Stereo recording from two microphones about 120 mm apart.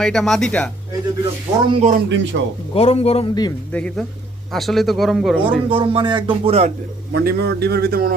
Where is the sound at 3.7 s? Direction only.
5° left (ahead or behind).